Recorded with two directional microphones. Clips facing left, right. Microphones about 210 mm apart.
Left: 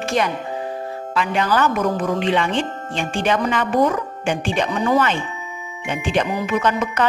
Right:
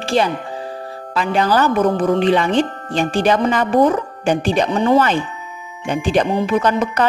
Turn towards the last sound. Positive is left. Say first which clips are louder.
# right 3 dB
turn(degrees=-35)  # may be behind; listen again after turning